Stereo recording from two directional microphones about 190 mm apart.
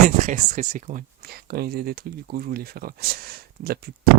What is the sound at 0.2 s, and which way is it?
Speech, 40° right (ahead or behind).